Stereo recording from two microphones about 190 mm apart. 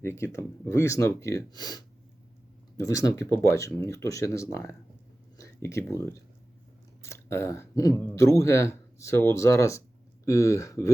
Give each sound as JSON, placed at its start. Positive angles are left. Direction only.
{"t": 0.0, "sound": "speech", "side_deg": 15}